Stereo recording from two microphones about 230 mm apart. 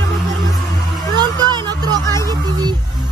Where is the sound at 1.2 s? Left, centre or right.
Centre.